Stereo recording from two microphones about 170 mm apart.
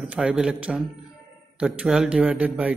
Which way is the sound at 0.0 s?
5° right (ahead or behind).